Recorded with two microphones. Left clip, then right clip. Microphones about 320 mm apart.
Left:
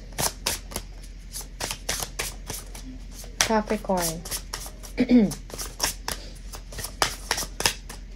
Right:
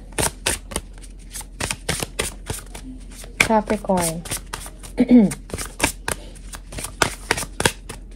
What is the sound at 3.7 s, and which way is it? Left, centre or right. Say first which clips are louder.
Speech: right 5 dB; right.